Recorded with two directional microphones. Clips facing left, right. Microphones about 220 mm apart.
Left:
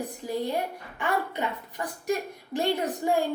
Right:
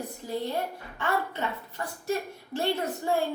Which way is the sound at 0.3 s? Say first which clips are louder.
Left 2 dB; 15° left (ahead or behind).